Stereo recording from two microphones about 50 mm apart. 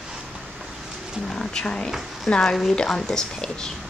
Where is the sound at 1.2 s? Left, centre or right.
Centre.